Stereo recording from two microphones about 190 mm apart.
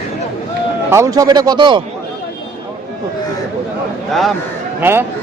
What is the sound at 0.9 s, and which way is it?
Speech, 15° right (ahead or behind).